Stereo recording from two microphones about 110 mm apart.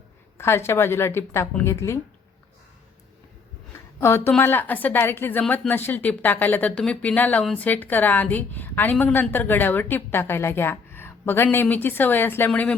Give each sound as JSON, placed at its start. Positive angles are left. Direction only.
{"t": 0.3, "sound": "a woman's voice", "side_deg": 25}
{"t": 4.0, "sound": "a woman's voice", "side_deg": 25}